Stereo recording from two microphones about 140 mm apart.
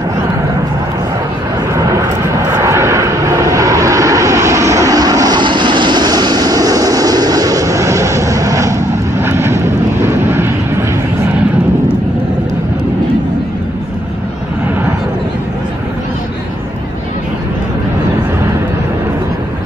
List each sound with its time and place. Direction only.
1.8 s vehicle: 25° right (ahead or behind)